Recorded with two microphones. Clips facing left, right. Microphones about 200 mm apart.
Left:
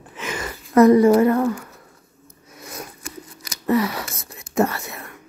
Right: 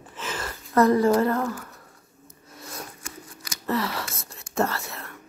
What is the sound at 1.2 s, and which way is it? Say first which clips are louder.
Speech: left 6 dB; 15° left (ahead or behind).